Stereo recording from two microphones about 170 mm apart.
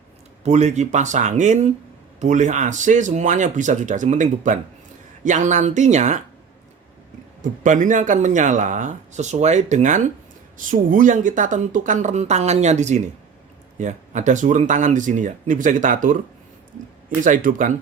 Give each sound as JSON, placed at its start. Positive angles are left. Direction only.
{"t": 0.4, "sound": "speech", "side_deg": -40}
{"t": 7.4, "sound": "speech", "side_deg": -50}
{"t": 17.2, "sound": "speech", "side_deg": -50}